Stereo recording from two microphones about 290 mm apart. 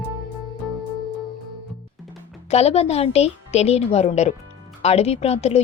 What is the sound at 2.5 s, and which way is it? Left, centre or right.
Speech, left.